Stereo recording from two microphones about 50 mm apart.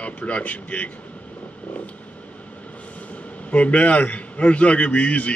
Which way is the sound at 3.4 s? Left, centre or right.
Left.